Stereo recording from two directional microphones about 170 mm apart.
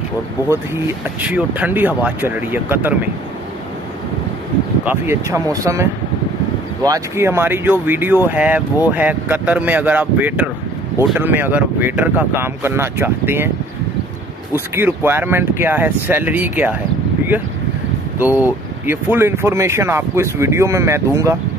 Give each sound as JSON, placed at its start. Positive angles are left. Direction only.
{"t": 1.2, "sound": "speech", "side_deg": -10}
{"t": 4.8, "sound": "speech", "side_deg": -15}
{"t": 14.5, "sound": "speech", "side_deg": -15}
{"t": 18.2, "sound": "speech", "side_deg": -10}